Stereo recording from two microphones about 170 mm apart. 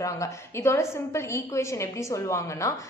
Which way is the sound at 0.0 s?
15° left (ahead or behind).